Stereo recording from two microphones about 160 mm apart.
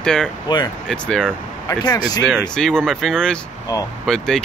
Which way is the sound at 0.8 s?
5° left (ahead or behind).